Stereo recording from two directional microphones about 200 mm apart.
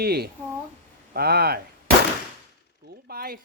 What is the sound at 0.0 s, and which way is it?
Speech, 50° right (ahead or behind).